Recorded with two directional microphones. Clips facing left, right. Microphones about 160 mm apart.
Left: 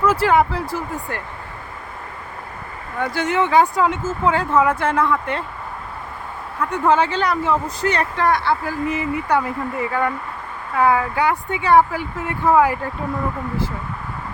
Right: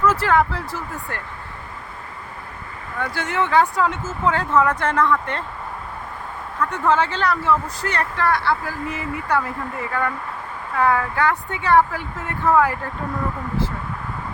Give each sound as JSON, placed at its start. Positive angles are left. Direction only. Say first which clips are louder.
{"t": 0.0, "sound": "speech", "louder": "left 2 dB", "side_deg": 10}
{"t": 3.0, "sound": "speech", "louder": "left 4 dB", "side_deg": 15}
{"t": 6.6, "sound": "speech", "louder": "left 2 dB", "side_deg": 10}
{"t": 10.8, "sound": "speech", "louder": "left 2 dB", "side_deg": 15}